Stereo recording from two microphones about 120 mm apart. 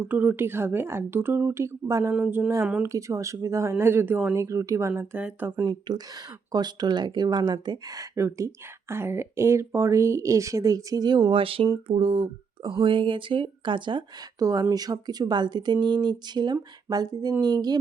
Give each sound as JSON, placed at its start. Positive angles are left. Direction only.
{"t": 0.0, "sound": "speech", "side_deg": -15}
{"t": 2.1, "sound": "speech", "side_deg": -10}
{"t": 2.8, "sound": "speech", "side_deg": -25}
{"t": 5.1, "sound": "speech", "side_deg": -15}
{"t": 5.9, "sound": "speech", "side_deg": -40}
{"t": 14.4, "sound": "speech", "side_deg": -30}